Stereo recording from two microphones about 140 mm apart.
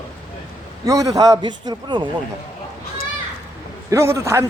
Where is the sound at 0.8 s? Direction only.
25° right (ahead or behind).